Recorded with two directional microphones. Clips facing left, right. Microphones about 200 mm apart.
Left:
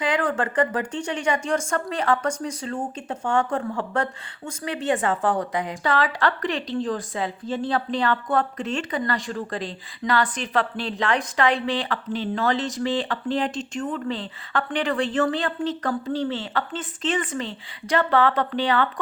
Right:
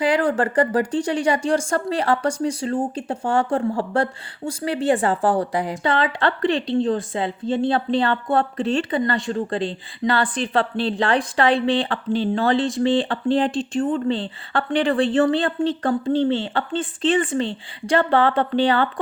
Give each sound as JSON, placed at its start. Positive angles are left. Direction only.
{"t": 0.0, "sound": "speech", "side_deg": -35}